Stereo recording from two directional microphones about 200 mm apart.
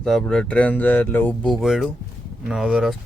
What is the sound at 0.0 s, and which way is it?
Speech, 5° left (ahead or behind).